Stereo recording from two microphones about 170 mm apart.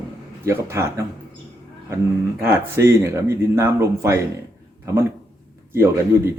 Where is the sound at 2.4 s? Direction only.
15° right (ahead or behind).